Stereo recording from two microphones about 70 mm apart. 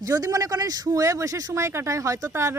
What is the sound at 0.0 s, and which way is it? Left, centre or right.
Speech, right.